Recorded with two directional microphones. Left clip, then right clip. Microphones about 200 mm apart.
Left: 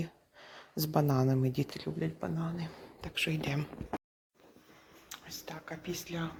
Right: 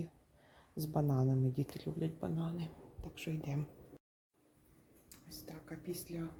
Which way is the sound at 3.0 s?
5° right (ahead or behind).